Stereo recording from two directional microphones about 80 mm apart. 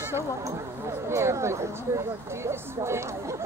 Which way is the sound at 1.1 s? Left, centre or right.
Right.